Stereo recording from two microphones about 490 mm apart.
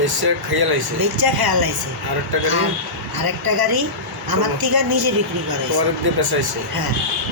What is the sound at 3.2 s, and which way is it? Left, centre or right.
Speech, right.